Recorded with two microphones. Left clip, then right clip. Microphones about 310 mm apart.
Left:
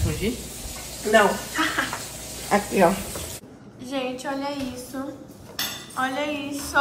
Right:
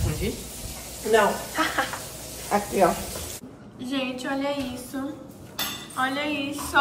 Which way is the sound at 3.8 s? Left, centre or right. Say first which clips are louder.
Left 1 dB; centre.